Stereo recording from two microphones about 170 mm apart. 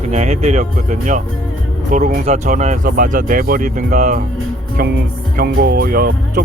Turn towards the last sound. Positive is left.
turn(degrees=-55)  # may be behind; listen again after turning